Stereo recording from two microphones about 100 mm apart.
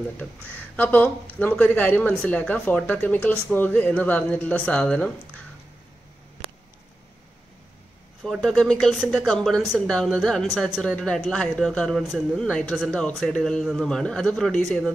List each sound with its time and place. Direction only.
0.2 s speech: 15° left (ahead or behind)
8.2 s a man's voice: centre (ahead or behind)
10.8 s a man's voice: 10° left (ahead or behind)
12.4 s a man's voice: 10° left (ahead or behind)